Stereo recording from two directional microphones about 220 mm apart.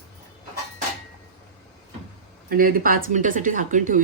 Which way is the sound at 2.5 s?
40° right (ahead or behind).